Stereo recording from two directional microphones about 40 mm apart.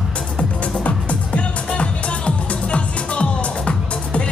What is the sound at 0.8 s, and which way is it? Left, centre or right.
Music, left.